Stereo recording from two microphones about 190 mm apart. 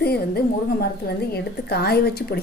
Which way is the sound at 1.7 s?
60° left (ahead or behind).